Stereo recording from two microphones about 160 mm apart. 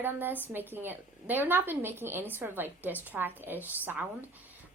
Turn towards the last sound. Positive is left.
turn(degrees=-10)  # may be behind; listen again after turning